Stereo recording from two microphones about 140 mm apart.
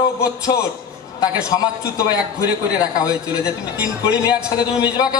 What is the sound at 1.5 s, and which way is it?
A man's voice, 25° left (ahead or behind).